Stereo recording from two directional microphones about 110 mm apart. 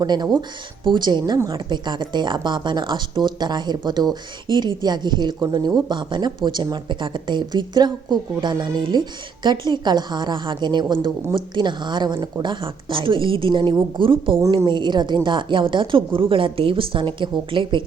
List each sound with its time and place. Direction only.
0.0 s speech: 40° right (ahead or behind)